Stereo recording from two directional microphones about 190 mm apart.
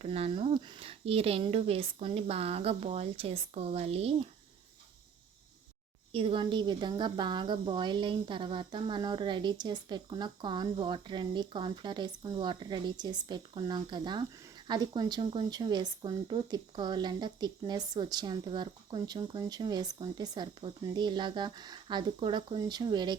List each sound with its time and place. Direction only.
0.0 s speech: 30° right (ahead or behind)
6.1 s speech: 30° right (ahead or behind)